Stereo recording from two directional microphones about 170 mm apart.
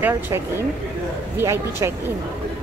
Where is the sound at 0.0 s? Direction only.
15° right (ahead or behind).